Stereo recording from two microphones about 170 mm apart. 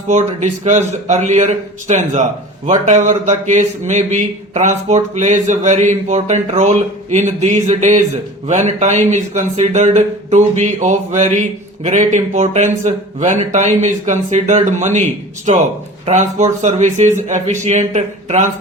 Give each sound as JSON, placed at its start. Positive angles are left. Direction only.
{"t": 0.1, "sound": "speech", "side_deg": -45}
{"t": 16.0, "sound": "speech", "side_deg": -40}